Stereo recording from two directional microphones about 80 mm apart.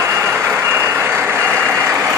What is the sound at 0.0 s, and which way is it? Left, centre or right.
Vehicle, right.